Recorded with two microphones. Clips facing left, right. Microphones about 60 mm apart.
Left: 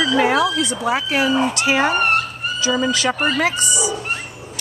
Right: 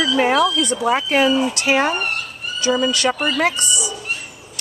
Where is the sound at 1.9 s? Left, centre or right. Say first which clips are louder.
Left 6 dB; left.